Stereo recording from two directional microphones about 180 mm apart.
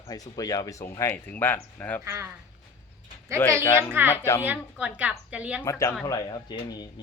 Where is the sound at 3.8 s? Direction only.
10° right (ahead or behind).